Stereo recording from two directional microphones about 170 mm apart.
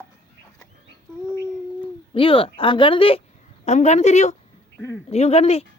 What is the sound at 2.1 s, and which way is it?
A woman's voice, 30° left (ahead or behind).